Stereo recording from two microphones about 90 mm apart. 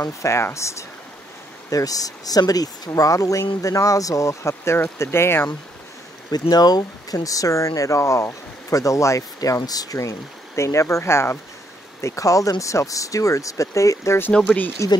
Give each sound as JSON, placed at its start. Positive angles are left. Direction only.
{"t": 0.0, "sound": "speech", "side_deg": 30}
{"t": 6.5, "sound": "speech", "side_deg": 50}